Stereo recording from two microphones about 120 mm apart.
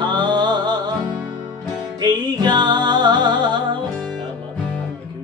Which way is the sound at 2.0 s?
35° right (ahead or behind).